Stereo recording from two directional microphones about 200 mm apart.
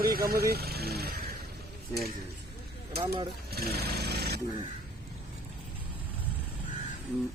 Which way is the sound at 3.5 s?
50° right (ahead or behind).